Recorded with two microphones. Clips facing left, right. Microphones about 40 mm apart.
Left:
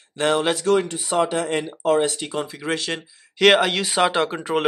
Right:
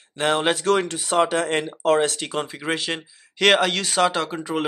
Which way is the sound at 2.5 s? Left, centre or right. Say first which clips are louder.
Even; centre.